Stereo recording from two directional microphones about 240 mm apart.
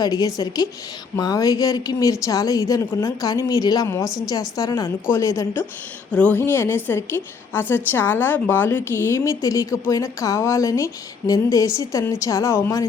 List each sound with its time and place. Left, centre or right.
0.0 s a woman's voice: centre